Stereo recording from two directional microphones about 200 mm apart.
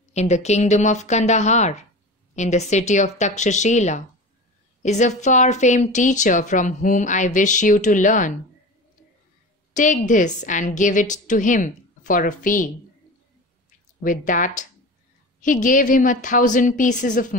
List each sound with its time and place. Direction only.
0.1 s a woman's voice: 35° left (ahead or behind)
9.8 s a woman's voice: 40° left (ahead or behind)
14.0 s a woman's voice: 40° left (ahead or behind)